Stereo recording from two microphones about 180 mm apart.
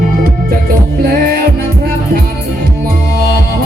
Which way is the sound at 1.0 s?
55° right (ahead or behind).